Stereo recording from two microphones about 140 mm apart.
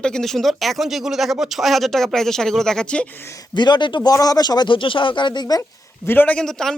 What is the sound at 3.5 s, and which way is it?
Speech, 30° left (ahead or behind).